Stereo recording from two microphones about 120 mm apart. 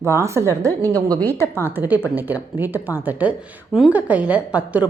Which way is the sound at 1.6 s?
15° right (ahead or behind).